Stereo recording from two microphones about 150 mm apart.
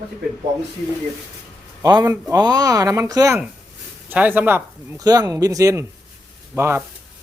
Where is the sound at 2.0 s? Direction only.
20° right (ahead or behind).